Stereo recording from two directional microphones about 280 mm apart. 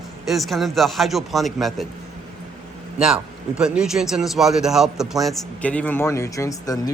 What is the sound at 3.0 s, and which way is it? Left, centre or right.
A man's voice, centre.